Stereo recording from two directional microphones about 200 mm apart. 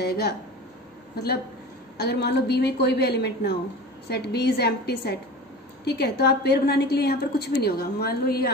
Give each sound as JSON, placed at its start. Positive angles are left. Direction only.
{"t": 0.0, "sound": "a woman's voice", "side_deg": 55}